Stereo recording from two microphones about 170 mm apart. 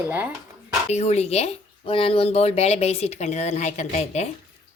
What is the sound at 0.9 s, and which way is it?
Speech, 40° left (ahead or behind).